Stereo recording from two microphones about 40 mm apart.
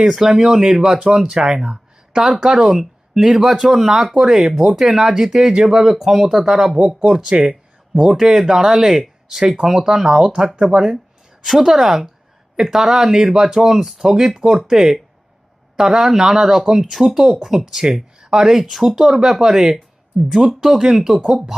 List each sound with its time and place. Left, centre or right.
0.2 s speech: centre
2.6 s speech: centre
11.4 s a woman's voice: centre